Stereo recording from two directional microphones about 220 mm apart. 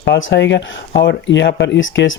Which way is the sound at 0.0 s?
55° left (ahead or behind).